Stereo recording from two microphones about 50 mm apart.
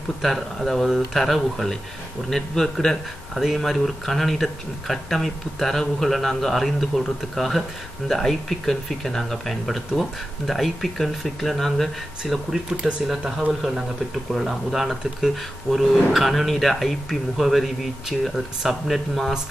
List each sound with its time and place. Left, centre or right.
0.2 s speech: centre
0.8 s a man's voice: centre
12.6 s speech: right
14.3 s speech: centre